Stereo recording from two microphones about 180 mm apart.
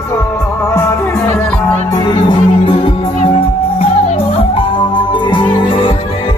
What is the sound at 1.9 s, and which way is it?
Music, 25° left (ahead or behind).